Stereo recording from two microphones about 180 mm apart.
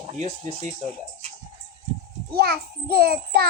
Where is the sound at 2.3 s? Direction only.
60° right (ahead or behind).